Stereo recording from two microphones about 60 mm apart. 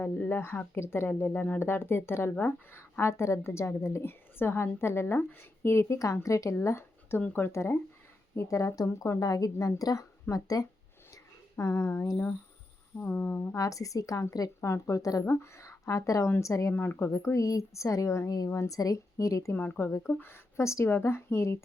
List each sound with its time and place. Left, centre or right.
0.0 s speech: left
3.0 s a woman's voice: left
8.4 s a woman's voice: left
11.5 s a woman's voice: left
13.6 s a woman's voice: left
14.7 s a woman's voice: left
15.3 s speech: left
16.7 s speech: left
17.1 s speech: left
18.3 s a woman's voice: left
19.1 s speech: left
19.5 s speech: left
20.7 s speech: left
20.9 s a woman's voice: left